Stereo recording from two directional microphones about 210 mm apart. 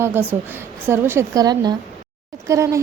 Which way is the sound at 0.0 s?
10° right (ahead or behind).